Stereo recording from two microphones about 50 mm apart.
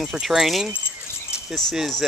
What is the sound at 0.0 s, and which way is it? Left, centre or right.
Speech, centre.